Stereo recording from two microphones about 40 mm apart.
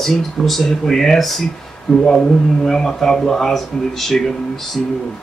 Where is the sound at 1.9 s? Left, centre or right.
Centre.